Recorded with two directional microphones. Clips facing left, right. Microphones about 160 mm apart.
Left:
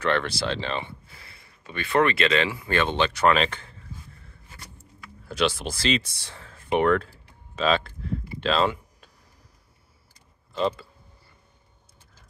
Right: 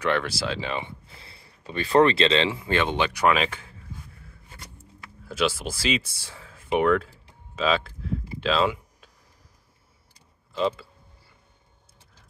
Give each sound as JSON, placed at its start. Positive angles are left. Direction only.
{"t": 0.0, "sound": "speech", "side_deg": -10}
{"t": 1.2, "sound": "speech", "side_deg": -30}
{"t": 4.7, "sound": "speech", "side_deg": -5}
{"t": 7.5, "sound": "a sound", "side_deg": -5}
{"t": 10.5, "sound": "speech", "side_deg": 0}